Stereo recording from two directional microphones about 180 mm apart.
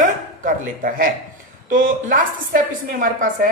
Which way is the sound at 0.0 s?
50° right (ahead or behind).